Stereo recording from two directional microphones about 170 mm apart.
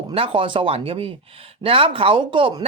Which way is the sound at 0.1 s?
35° right (ahead or behind).